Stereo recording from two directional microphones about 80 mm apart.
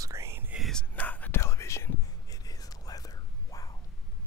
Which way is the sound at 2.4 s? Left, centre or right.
Left.